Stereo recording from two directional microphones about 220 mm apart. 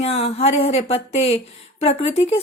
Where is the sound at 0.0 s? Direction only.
25° left (ahead or behind).